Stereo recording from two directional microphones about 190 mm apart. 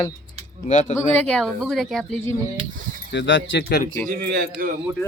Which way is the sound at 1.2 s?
5° left (ahead or behind).